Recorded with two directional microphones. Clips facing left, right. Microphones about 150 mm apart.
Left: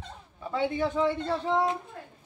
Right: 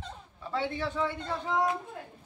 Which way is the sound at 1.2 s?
30° left (ahead or behind).